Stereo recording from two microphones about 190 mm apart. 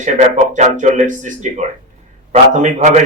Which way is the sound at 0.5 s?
40° right (ahead or behind).